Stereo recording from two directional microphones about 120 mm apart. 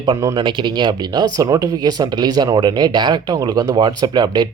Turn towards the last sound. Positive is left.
turn(degrees=-35)  # may be behind; listen again after turning